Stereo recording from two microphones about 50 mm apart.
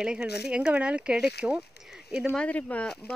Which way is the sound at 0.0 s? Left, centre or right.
Centre.